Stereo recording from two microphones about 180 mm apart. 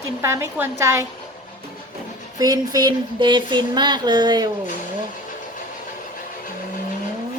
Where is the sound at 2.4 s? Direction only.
20° right (ahead or behind).